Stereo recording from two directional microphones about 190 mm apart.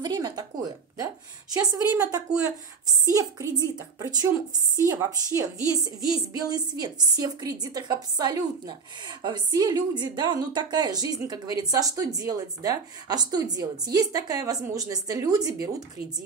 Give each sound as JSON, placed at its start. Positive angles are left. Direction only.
{"t": 0.0, "sound": "a woman's voice", "side_deg": -20}